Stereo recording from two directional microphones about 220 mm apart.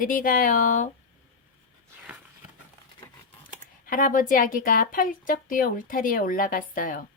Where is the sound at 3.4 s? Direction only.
40° left (ahead or behind).